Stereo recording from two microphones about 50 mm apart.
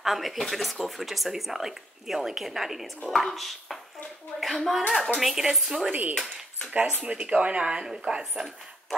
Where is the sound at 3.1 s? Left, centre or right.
Centre.